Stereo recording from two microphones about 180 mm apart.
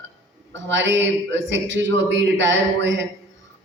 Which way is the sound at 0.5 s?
90° right.